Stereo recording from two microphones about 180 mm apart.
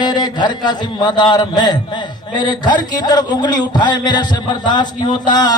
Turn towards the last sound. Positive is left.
turn(degrees=25)  # may be behind; listen again after turning